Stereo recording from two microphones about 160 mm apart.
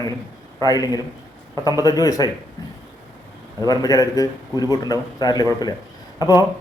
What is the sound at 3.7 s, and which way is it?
Speech, 20° left (ahead or behind).